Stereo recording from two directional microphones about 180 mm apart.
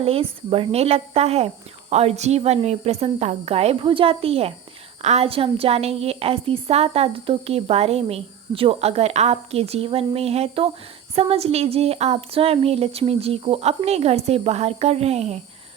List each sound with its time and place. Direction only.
0.0 s a woman's voice: 30° right (ahead or behind)